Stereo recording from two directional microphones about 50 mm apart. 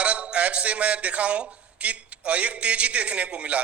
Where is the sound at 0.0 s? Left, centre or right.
Right.